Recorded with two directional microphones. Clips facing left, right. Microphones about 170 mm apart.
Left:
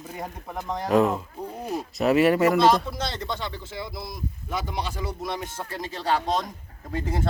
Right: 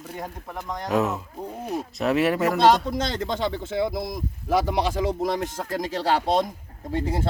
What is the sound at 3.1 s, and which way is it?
Speech, 90° right.